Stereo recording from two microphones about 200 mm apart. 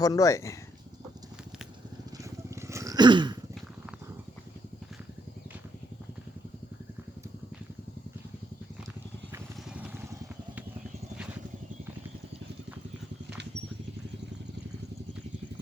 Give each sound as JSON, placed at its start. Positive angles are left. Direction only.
{"t": 0.0, "sound": "speech", "side_deg": 15}
{"t": 2.6, "sound": "throat clearing", "side_deg": -15}
{"t": 9.3, "sound": "vehicle", "side_deg": -5}